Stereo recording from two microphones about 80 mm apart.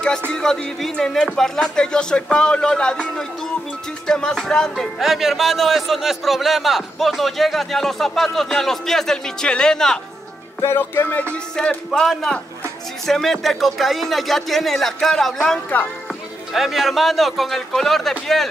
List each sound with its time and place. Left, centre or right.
0.3 s speech: centre
10.6 s music: left
11.5 s speech: centre